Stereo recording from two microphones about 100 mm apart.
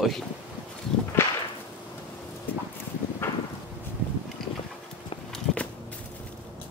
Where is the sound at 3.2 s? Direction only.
25° left (ahead or behind).